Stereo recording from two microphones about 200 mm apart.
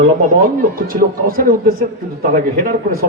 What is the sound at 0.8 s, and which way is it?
A man's voice, 45° right (ahead or behind).